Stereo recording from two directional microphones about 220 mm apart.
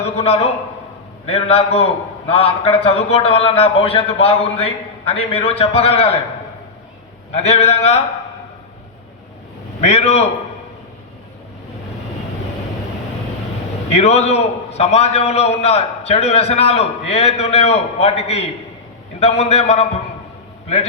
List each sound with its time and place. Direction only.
0.0 s a sound: 30° left (ahead or behind)
1.3 s a man's voice: 30° left (ahead or behind)
7.3 s a man's voice: 30° left (ahead or behind)
9.8 s a man's voice: 30° left (ahead or behind)
13.9 s a man's voice: 30° left (ahead or behind)